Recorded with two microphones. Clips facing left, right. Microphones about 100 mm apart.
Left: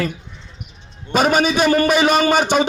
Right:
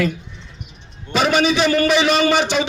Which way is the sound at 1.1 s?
45° left (ahead or behind).